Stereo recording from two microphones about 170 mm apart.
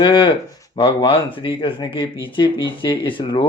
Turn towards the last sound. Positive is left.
turn(degrees=30)  # may be behind; listen again after turning